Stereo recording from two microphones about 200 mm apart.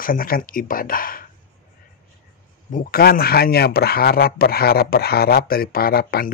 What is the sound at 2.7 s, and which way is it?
Speech, 45° left (ahead or behind).